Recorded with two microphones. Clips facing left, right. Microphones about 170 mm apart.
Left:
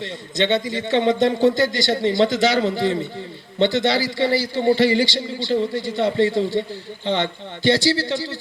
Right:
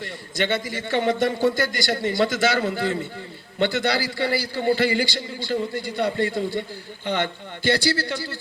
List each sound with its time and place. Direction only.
0.0 s a man's voice: 20° left (ahead or behind)